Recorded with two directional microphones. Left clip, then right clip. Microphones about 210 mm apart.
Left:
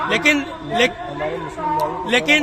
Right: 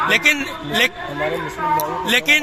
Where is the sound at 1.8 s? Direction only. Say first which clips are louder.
Even; 20° right (ahead or behind).